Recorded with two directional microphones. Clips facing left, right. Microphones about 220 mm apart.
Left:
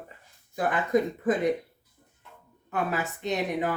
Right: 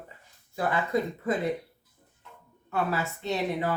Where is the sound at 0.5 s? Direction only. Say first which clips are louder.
Left 2 dB; 15° left (ahead or behind).